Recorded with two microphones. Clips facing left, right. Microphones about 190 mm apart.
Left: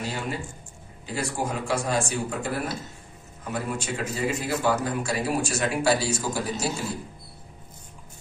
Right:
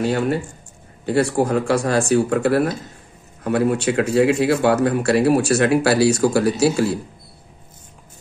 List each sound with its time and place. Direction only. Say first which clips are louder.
0.0 s a man's voice: right 11 dB; 65° right (ahead or behind)